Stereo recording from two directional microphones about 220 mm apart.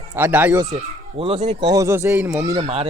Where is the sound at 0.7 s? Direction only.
25° right (ahead or behind).